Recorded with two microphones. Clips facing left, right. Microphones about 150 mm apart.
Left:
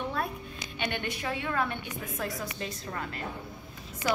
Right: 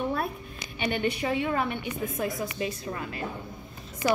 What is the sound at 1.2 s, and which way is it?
A woman's voice, 20° right (ahead or behind).